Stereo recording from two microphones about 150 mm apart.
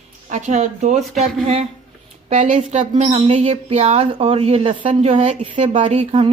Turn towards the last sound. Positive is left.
turn(degrees=-45)  # may be behind; listen again after turning